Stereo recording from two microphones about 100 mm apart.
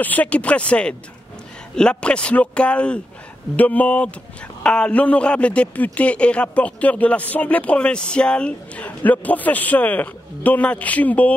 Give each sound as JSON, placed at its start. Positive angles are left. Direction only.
{"t": 0.0, "sound": "a man's voice", "side_deg": 15}